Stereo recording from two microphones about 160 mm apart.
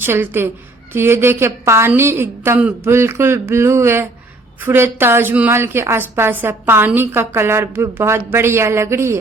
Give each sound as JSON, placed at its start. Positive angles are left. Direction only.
{"t": 0.0, "sound": "a woman's voice", "side_deg": -15}